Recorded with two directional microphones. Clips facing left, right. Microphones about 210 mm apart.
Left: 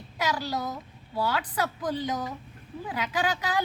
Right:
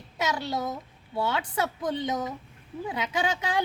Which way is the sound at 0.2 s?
25° right (ahead or behind).